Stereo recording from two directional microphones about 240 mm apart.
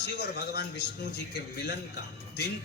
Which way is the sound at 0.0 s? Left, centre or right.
Left.